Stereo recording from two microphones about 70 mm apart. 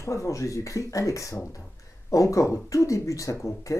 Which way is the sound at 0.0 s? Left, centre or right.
Left.